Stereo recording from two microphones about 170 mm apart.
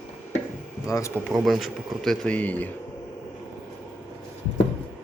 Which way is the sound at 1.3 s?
Centre (ahead or behind).